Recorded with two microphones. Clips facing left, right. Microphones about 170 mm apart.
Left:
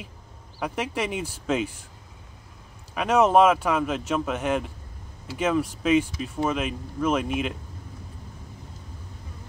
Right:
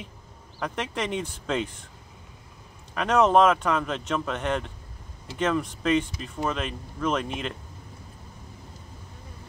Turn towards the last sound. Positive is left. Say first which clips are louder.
# left 3 dB
turn(degrees=5)  # may be behind; listen again after turning